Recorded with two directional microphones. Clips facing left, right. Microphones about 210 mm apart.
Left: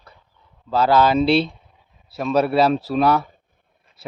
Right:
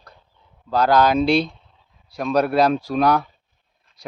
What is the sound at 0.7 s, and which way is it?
Speech, 5° left (ahead or behind).